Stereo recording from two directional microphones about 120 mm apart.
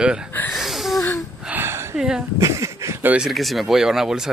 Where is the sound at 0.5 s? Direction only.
Centre (ahead or behind).